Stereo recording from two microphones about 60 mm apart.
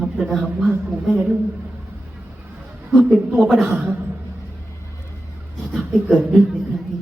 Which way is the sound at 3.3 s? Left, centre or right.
Centre.